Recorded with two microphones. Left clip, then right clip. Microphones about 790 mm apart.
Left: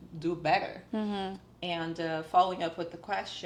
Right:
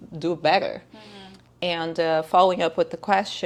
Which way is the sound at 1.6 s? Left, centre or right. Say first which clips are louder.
Right 10 dB; right.